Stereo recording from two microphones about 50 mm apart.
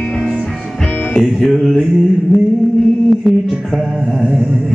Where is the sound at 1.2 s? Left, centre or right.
Centre.